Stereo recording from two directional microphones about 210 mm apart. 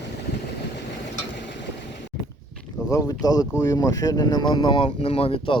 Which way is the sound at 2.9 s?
15° left (ahead or behind).